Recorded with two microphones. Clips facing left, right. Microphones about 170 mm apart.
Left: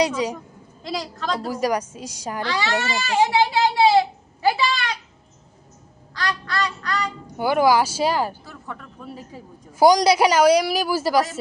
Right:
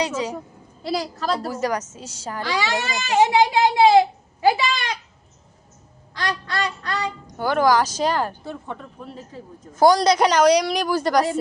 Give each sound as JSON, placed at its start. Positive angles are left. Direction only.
{"t": 0.8, "sound": "a woman's voice", "side_deg": -5}
{"t": 1.5, "sound": "a woman's voice", "side_deg": 10}
{"t": 2.4, "sound": "speech", "side_deg": -15}
{"t": 6.1, "sound": "a sound", "side_deg": -20}
{"t": 7.3, "sound": "a woman's voice", "side_deg": 10}
{"t": 8.4, "sound": "speech", "side_deg": -25}
{"t": 9.0, "sound": "a woman's voice", "side_deg": 10}